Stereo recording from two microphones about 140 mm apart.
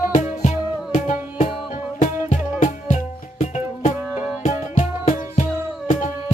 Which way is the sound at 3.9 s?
10° right (ahead or behind).